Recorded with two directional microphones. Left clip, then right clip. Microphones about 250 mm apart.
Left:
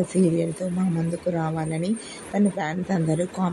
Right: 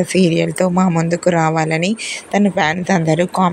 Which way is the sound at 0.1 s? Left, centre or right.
Right.